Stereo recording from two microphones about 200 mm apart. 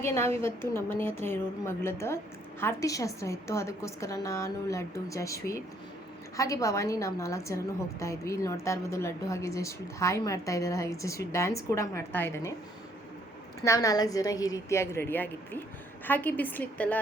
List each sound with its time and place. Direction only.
0.0 s a woman's voice: 10° left (ahead or behind)
13.6 s a woman's voice: 15° left (ahead or behind)